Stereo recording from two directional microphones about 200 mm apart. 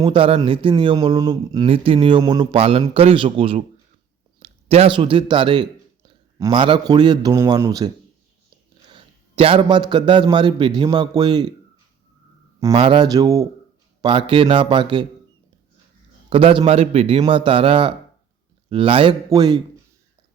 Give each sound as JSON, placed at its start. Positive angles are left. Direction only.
{"t": 0.0, "sound": "speech", "side_deg": -25}
{"t": 9.3, "sound": "speech", "side_deg": -25}
{"t": 12.7, "sound": "speech", "side_deg": -25}
{"t": 16.3, "sound": "speech", "side_deg": -25}